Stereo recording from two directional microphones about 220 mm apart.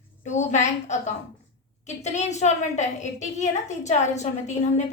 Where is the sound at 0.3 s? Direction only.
30° left (ahead or behind).